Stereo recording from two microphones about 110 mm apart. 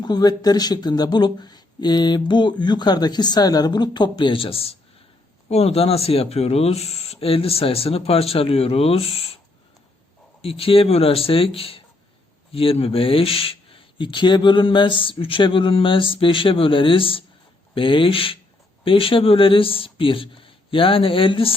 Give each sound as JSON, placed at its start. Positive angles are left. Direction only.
{"t": 0.0, "sound": "speech", "side_deg": 40}
{"t": 10.4, "sound": "speech", "side_deg": 60}